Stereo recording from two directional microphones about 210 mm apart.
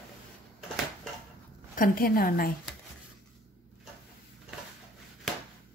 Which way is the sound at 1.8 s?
45° left (ahead or behind).